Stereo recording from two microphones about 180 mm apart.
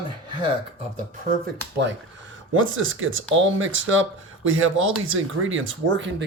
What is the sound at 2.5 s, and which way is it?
Speech, 90° right.